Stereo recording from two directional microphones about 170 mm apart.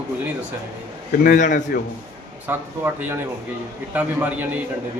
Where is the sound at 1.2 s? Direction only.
50° left (ahead or behind).